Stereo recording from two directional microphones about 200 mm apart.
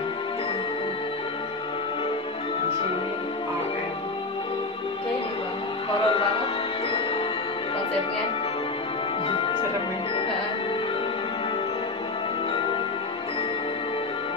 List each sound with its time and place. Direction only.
6.0 s music: 30° left (ahead or behind)
9.3 s music: 25° left (ahead or behind)